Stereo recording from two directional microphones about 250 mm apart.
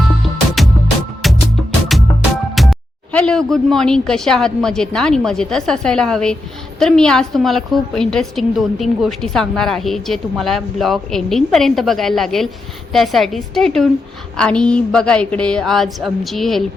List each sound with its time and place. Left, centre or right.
1.2 s music: centre
1.9 s a woman's voice: centre